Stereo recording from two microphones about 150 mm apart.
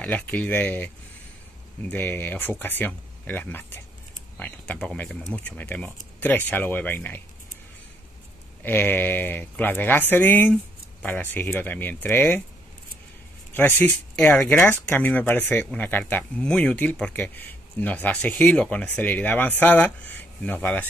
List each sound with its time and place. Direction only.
0.0 s speech: 10° left (ahead or behind)
8.6 s speech: 15° left (ahead or behind)
13.5 s speech: 15° left (ahead or behind)